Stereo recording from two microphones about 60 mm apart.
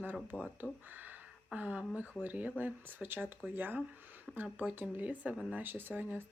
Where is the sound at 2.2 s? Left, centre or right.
Right.